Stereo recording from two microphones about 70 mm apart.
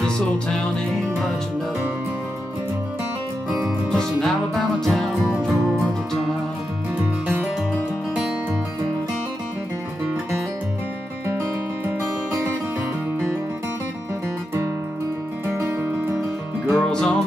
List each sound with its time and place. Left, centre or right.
0.0 s music: centre
3.9 s music: centre
15.4 s music: right
16.7 s music: centre